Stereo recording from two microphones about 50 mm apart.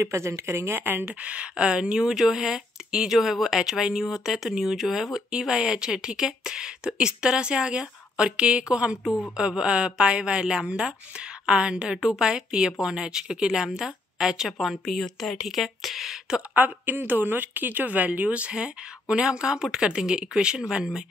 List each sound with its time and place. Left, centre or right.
0.0 s speech: right
1.2 s speech: right
16.5 s speech: right; by 21.0 s centre